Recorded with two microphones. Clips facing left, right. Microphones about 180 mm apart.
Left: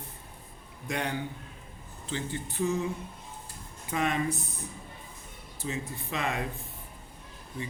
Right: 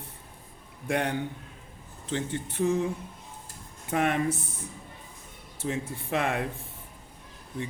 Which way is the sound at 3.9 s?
60° right (ahead or behind).